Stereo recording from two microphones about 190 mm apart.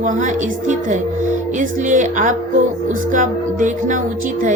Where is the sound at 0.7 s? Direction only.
40° right (ahead or behind).